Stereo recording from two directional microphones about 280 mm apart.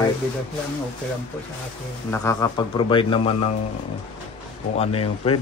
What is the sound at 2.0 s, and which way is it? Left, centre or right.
Speech, centre.